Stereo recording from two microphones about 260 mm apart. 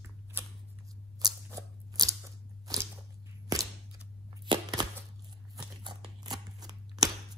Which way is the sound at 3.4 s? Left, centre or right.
Centre.